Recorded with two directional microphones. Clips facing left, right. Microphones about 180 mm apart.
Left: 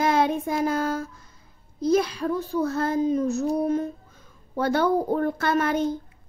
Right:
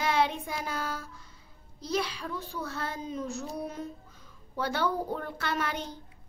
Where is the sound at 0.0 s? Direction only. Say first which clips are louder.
Left 6 dB; 45° left (ahead or behind).